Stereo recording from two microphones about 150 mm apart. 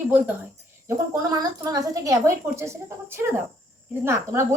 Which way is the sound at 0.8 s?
25° right (ahead or behind).